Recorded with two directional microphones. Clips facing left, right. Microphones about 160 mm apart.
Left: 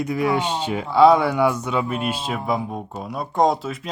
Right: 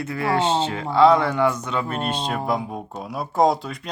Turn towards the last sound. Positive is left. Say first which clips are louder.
# even
turn(degrees=0)  # may be behind; listen again after turning